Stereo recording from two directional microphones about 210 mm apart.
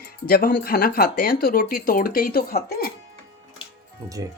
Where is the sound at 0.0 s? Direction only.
45° left (ahead or behind).